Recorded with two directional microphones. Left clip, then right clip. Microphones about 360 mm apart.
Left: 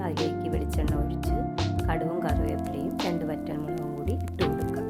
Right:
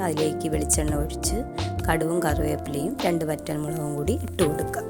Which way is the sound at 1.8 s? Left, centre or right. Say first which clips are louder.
Right 8 dB; centre.